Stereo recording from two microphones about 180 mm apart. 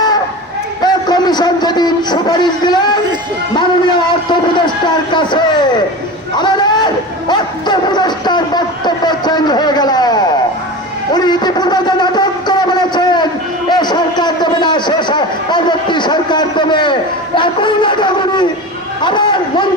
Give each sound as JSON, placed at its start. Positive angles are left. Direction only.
{"t": 0.9, "sound": "a man's voice", "side_deg": 25}
{"t": 11.1, "sound": "a sound", "side_deg": 25}
{"t": 13.7, "sound": "a man's voice", "side_deg": 25}